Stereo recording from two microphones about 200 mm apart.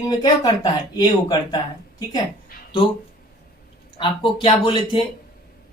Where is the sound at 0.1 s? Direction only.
20° left (ahead or behind).